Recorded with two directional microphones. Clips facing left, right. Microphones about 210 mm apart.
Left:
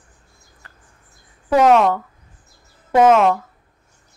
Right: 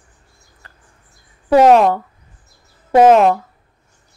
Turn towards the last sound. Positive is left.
turn(degrees=-30)  # may be behind; listen again after turning